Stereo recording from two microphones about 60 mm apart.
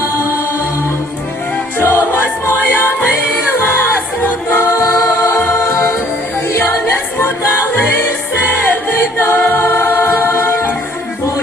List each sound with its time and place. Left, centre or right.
1.8 s music: left
4.4 s choir: left
5.7 s music: left
7.8 s music: left
9.7 s choir: left